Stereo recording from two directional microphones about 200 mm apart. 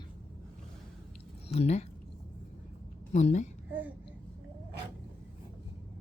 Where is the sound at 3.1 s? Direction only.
35° left (ahead or behind).